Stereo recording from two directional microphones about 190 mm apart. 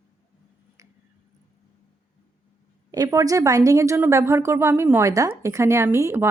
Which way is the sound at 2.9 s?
20° right (ahead or behind).